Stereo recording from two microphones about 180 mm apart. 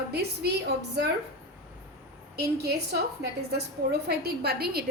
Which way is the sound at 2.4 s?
65° right (ahead or behind).